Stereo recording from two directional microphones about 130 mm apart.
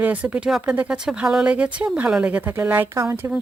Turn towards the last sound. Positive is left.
turn(degrees=-20)  # may be behind; listen again after turning